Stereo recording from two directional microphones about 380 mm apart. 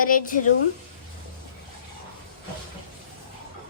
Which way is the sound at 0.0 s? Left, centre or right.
Left.